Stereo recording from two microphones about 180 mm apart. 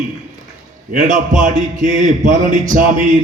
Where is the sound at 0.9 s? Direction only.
45° right (ahead or behind).